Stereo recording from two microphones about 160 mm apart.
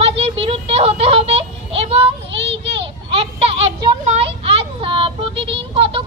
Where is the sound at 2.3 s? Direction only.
90° right.